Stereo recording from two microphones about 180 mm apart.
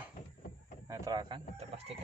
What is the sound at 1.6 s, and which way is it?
Speech, 35° right (ahead or behind).